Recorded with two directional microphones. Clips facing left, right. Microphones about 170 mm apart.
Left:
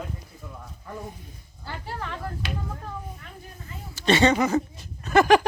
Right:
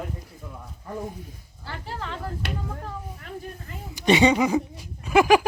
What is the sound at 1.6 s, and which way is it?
Speech, 10° left (ahead or behind).